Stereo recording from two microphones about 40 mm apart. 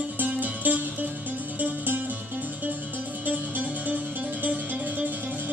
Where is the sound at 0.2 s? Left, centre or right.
Right.